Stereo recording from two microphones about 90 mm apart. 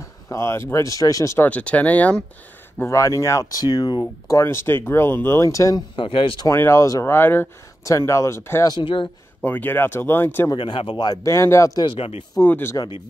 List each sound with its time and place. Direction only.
0.0 s speech: 30° left (ahead or behind)
1.5 s speech: 15° left (ahead or behind)
2.8 s speech: 35° left (ahead or behind)
4.0 s speech: 30° left (ahead or behind)
5.9 s speech: 75° left (ahead or behind)
6.4 s speech: 30° left (ahead or behind)
7.1 s speech: 25° left (ahead or behind)
7.8 s speech: 35° left (ahead or behind)
8.8 s speech: 70° left (ahead or behind)
9.4 s speech: 20° left (ahead or behind)
10.6 s speech: 75° left (ahead or behind)
11.2 s speech: 35° left (ahead or behind)
11.8 s speech: 75° left (ahead or behind)
12.4 s speech: 25° left (ahead or behind)